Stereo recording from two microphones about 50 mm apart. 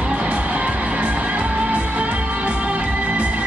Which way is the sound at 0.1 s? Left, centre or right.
Right.